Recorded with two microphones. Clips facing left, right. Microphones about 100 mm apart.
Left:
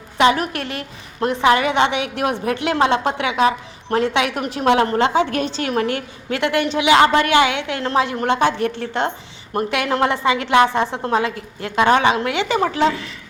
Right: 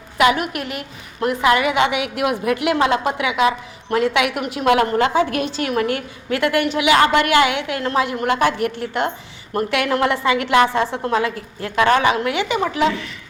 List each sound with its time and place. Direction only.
0.2 s a woman's voice: 35° left (ahead or behind)